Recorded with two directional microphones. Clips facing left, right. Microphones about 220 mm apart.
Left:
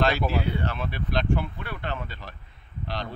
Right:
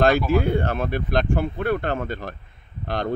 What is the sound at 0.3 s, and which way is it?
Speech, 50° right (ahead or behind).